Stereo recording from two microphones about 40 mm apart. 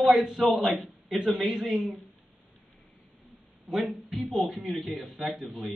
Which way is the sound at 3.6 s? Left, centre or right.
Centre.